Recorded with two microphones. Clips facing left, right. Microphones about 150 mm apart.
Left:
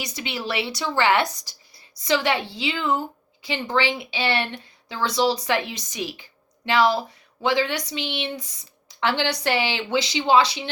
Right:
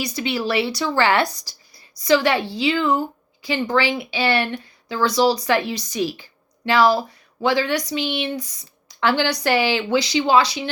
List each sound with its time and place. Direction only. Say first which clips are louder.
0.0 s a woman's voice: right 7 dB; 20° left (ahead or behind)
7.4 s a woman's voice: right 3 dB; 25° left (ahead or behind)